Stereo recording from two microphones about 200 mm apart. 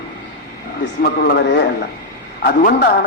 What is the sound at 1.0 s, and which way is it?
Speech, 55° left (ahead or behind).